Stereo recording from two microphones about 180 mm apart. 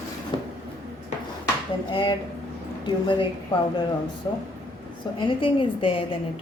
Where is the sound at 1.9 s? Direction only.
25° left (ahead or behind).